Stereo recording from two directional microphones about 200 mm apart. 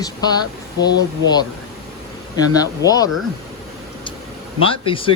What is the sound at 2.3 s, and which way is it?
Speech, 20° left (ahead or behind).